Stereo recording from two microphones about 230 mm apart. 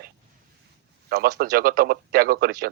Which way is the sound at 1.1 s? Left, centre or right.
Right.